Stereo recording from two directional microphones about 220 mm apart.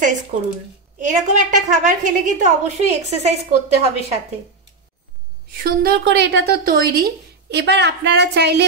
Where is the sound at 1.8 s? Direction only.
35° right (ahead or behind).